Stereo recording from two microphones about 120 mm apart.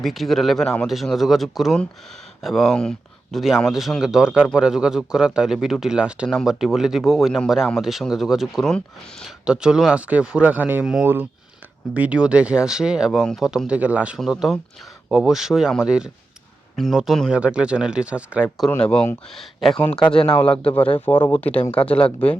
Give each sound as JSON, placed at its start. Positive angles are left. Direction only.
{"t": 0.0, "sound": "speech", "side_deg": 0}
{"t": 18.8, "sound": "speech", "side_deg": 10}